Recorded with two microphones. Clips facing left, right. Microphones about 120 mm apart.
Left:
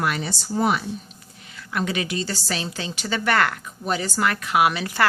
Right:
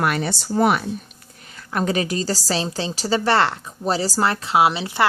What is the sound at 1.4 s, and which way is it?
A woman's voice, 40° right (ahead or behind).